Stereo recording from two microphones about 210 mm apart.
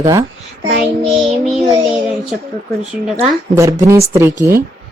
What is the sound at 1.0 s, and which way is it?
Child singing, centre (ahead or behind).